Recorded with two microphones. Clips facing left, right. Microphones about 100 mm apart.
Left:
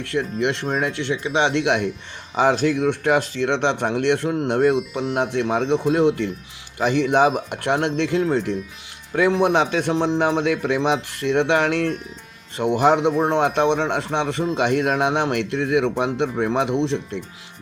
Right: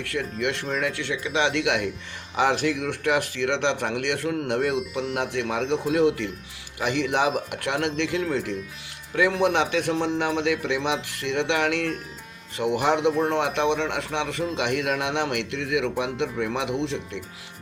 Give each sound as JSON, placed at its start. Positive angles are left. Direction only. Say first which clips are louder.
{"t": 0.0, "sound": "a man's voice", "louder": "left 5 dB", "side_deg": 30}